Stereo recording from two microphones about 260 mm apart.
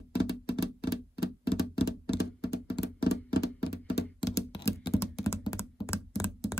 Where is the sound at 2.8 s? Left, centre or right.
Left.